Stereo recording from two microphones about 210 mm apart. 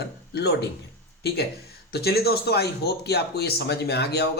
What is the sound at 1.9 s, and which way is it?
Speech, 50° left (ahead or behind).